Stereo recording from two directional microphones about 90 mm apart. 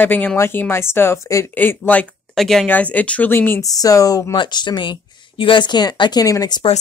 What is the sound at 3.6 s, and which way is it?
Speech, 40° left (ahead or behind).